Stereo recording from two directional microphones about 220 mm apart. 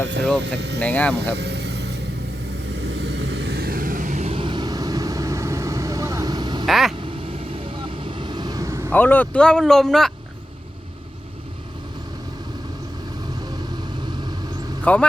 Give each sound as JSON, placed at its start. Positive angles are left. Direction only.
{"t": 0.4, "sound": "speech", "side_deg": -50}
{"t": 0.8, "sound": "speech", "side_deg": 5}
{"t": 1.1, "sound": "vehicle", "side_deg": -50}
{"t": 6.7, "sound": "vehicle", "side_deg": 0}
{"t": 6.9, "sound": "vehicle", "side_deg": -25}
{"t": 8.9, "sound": "speech", "side_deg": 10}
{"t": 14.9, "sound": "speech", "side_deg": 5}